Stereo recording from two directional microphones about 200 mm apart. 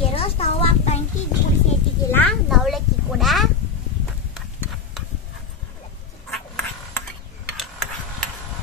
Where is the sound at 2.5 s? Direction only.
Centre (ahead or behind).